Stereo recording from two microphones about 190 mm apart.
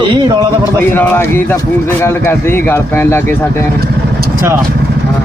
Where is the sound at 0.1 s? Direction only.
20° right (ahead or behind).